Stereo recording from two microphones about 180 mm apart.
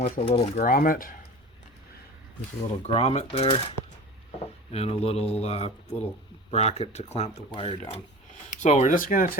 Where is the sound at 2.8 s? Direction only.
35° left (ahead or behind).